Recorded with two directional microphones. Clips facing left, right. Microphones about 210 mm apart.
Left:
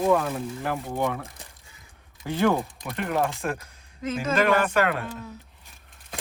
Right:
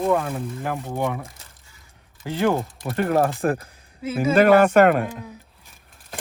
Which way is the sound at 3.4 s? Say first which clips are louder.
Right 7 dB; 35° right (ahead or behind).